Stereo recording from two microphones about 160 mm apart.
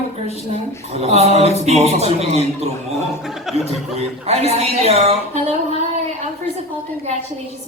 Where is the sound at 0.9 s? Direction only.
40° right (ahead or behind).